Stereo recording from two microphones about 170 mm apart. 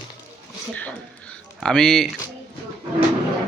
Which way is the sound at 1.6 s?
5° left (ahead or behind).